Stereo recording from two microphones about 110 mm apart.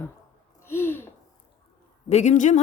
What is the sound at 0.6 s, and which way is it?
Gasp, 20° left (ahead or behind).